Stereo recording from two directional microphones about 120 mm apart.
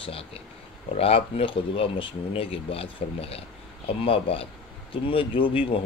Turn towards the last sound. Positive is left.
turn(degrees=50)  # may be behind; listen again after turning